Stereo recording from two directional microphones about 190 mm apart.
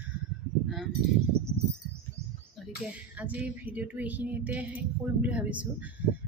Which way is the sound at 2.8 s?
5° right (ahead or behind).